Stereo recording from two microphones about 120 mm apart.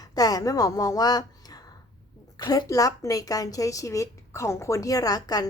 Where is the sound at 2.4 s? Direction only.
35° left (ahead or behind).